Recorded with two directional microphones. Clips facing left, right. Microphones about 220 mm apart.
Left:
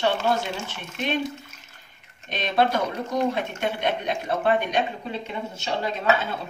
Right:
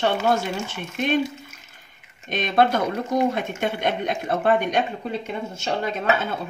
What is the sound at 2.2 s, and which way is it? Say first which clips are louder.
Speech: right 3 dB; 50° right (ahead or behind).